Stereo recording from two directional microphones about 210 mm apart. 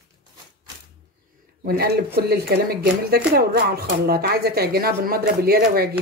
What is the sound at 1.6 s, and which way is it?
Speech, 50° right (ahead or behind).